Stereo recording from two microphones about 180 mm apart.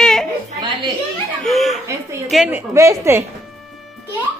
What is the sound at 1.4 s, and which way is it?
Speech, centre (ahead or behind).